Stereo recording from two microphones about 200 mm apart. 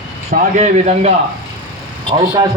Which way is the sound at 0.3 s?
35° right (ahead or behind).